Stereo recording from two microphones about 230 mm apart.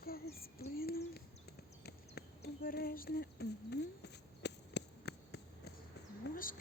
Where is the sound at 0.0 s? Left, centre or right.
Left.